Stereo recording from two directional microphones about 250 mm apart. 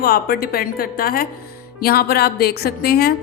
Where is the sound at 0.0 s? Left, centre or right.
Left.